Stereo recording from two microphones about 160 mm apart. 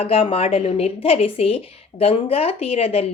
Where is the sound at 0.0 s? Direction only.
35° left (ahead or behind).